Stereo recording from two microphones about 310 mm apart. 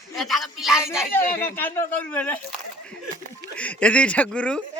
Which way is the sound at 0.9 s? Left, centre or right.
Centre.